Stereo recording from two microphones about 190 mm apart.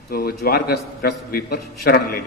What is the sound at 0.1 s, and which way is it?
A man's voice, 50° left (ahead or behind).